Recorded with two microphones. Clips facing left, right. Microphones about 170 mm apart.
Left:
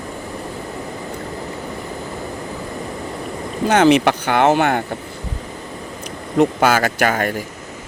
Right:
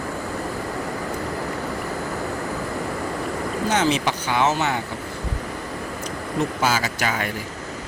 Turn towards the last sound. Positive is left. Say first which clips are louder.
# left 7 dB
turn(degrees=50)  # may be behind; listen again after turning